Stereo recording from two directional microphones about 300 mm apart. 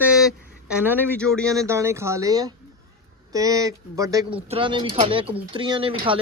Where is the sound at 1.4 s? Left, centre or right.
Centre.